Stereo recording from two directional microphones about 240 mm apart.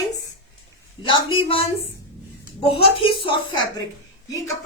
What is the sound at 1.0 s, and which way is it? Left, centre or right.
A woman's voice, left.